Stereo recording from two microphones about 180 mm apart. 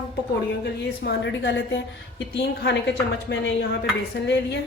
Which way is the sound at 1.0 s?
70° left (ahead or behind).